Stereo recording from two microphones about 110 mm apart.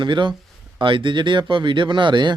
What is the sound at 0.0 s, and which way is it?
Speech, 45° right (ahead or behind).